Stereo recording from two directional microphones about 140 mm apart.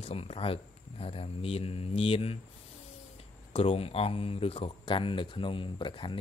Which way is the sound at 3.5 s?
40° left (ahead or behind).